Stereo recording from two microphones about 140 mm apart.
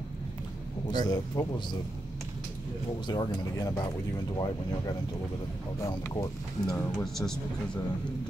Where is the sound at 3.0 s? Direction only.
30° left (ahead or behind).